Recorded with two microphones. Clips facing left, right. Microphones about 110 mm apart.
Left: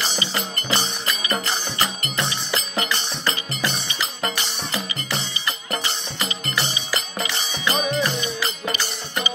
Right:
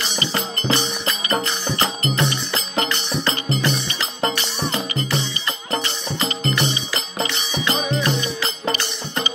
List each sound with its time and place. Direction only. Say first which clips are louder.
2.5 s music: right 2 dB; 25° right (ahead or behind)
6.2 s music: right 5 dB; 35° right (ahead or behind)
7.5 s music: right 1 dB; 25° right (ahead or behind)